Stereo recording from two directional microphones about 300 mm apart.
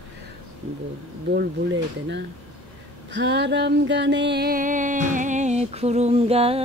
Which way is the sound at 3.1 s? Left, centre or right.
Right.